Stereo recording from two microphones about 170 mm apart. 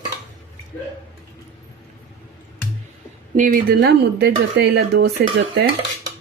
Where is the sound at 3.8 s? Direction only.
75° right (ahead or behind).